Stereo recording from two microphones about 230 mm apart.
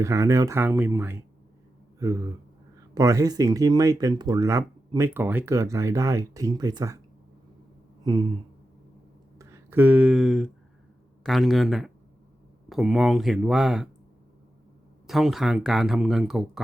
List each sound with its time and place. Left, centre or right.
0.0 s speech: centre
8.0 s a sound: centre
9.4 s speech: centre
15.0 s speech: centre